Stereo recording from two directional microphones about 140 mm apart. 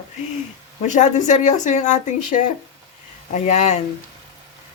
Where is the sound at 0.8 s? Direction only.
60° left (ahead or behind).